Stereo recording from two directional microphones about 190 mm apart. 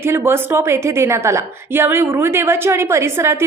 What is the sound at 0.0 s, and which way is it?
A woman's voice, 10° right (ahead or behind).